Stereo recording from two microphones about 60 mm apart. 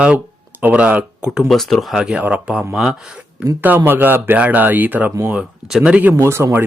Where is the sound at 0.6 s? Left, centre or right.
Right.